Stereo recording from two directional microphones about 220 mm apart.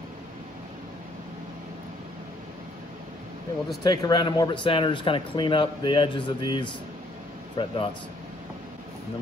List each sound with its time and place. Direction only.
3.8 s speech: 20° left (ahead or behind)